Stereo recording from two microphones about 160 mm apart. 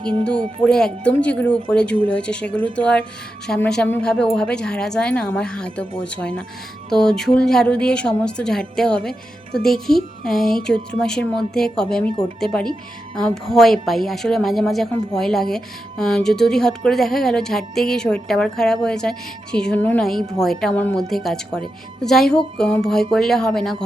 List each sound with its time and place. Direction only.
0.0 s speech: 30° right (ahead or behind)
0.6 s a woman's voice: 5° left (ahead or behind)
13.1 s a woman's voice: 5° left (ahead or behind)